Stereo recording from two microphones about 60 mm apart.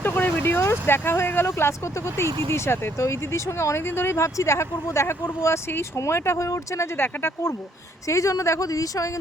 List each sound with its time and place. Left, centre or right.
0.0 s vehicle: left
0.7 s speech: left
3.0 s speech: left
6.9 s speech: left
8.0 s speech: left